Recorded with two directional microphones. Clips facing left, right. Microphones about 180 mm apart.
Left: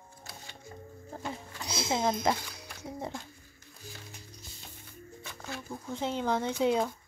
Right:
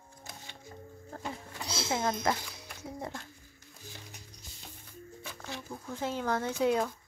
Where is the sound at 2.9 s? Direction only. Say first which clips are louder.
Left 2 dB; 20° left (ahead or behind).